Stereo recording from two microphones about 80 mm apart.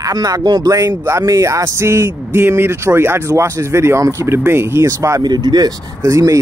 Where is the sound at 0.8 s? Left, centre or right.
Right.